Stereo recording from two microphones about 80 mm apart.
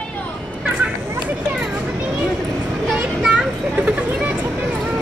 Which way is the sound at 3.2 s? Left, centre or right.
Centre.